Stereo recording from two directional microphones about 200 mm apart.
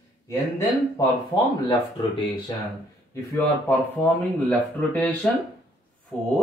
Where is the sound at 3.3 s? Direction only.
10° left (ahead or behind).